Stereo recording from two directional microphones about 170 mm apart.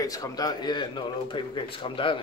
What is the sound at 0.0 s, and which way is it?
A man's voice, 20° left (ahead or behind).